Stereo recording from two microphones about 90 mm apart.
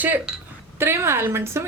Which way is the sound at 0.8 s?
30° right (ahead or behind).